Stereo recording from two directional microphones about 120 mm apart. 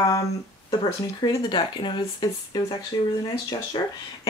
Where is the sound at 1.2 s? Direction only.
40° left (ahead or behind).